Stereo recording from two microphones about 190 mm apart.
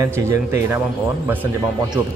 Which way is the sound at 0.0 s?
15° right (ahead or behind).